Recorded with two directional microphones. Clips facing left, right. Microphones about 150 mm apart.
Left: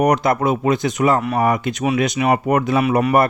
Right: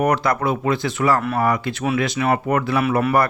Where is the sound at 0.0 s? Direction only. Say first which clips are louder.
Left 3 dB; 20° left (ahead or behind).